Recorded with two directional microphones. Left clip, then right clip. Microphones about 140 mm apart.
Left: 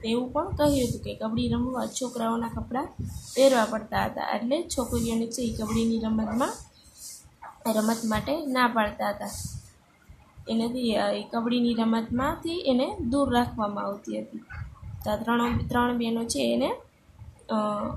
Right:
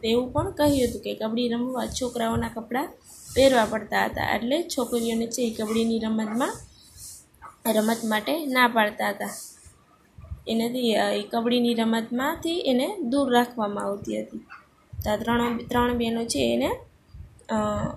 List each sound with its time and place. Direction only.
0.0 s a woman's voice: 5° right (ahead or behind)
7.6 s a woman's voice: 10° right (ahead or behind)
10.4 s a woman's voice: 10° right (ahead or behind)